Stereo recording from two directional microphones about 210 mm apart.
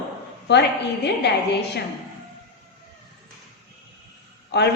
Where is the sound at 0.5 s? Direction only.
55° left (ahead or behind).